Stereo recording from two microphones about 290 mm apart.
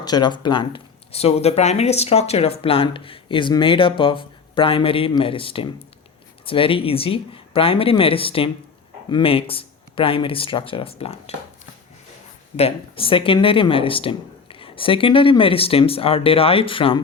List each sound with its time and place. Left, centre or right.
0.0 s speech: centre
12.5 s speech: centre